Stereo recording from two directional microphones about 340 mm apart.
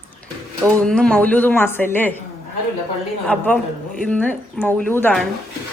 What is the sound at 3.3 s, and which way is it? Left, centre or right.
A woman's voice, centre.